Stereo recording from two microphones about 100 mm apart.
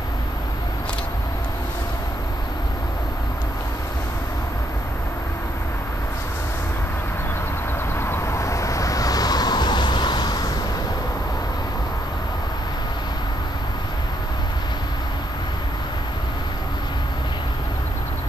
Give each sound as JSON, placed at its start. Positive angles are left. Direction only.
{"t": 8.0, "sound": "vehicle", "side_deg": 25}